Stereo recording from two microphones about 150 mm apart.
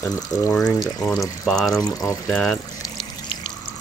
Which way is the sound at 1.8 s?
25° left (ahead or behind).